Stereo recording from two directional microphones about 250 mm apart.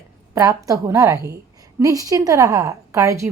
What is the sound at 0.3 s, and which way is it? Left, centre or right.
A woman's voice, centre.